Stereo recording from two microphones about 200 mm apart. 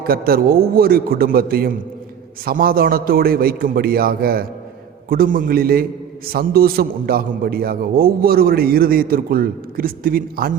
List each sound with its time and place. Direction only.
0.0 s a man's voice: 50° right (ahead or behind)